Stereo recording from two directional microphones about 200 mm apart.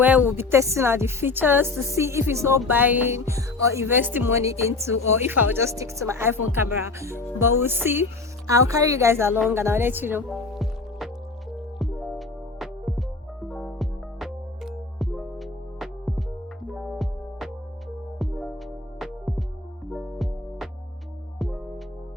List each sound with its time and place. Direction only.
0.0 s a woman's voice: 10° right (ahead or behind)
11.5 s music: centre (ahead or behind)